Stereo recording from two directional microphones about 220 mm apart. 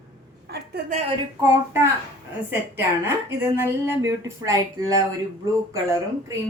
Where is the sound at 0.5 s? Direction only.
50° right (ahead or behind).